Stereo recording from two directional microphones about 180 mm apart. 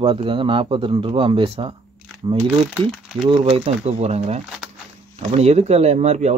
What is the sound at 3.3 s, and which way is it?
Speech, 30° right (ahead or behind).